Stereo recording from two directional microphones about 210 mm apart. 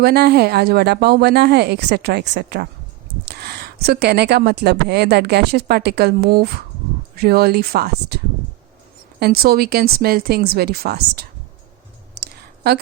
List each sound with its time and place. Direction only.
0.0 s a woman's voice: 50° right (ahead or behind)
9.2 s a woman's voice: 45° right (ahead or behind)
12.2 s a sound: 50° right (ahead or behind)